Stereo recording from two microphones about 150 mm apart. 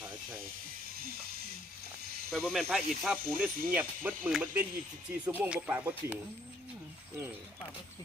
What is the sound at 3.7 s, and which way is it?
Speech, 10° right (ahead or behind).